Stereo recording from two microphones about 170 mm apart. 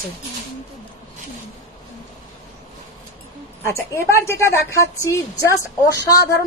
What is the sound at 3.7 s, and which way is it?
A woman's voice, 15° left (ahead or behind).